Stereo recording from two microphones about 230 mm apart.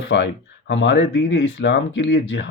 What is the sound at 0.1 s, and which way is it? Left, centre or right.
A man's voice, left.